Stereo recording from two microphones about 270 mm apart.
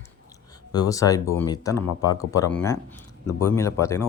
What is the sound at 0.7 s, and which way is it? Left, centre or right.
Speech, centre.